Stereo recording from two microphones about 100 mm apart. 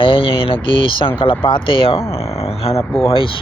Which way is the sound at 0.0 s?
60° left (ahead or behind).